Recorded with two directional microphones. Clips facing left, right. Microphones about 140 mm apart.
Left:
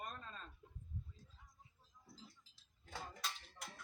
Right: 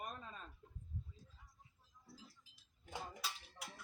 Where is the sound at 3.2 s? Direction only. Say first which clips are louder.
Even; 5° right (ahead or behind).